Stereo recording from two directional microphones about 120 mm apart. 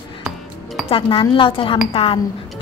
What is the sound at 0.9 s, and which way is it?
A woman's voice, 45° left (ahead or behind).